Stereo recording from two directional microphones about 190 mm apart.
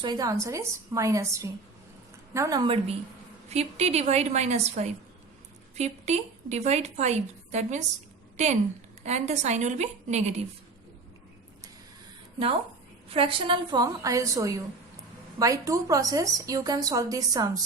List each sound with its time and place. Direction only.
0.0 s a woman's voice: 20° right (ahead or behind)
3.5 s a woman's voice: 35° right (ahead or behind)
9.0 s a woman's voice: 35° right (ahead or behind)
13.1 s a woman's voice: 30° right (ahead or behind)